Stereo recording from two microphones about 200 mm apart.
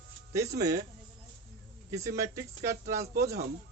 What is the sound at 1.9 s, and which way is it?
Speech, 15° right (ahead or behind).